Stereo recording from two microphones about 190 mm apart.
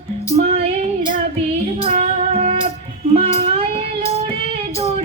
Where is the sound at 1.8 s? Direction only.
30° right (ahead or behind).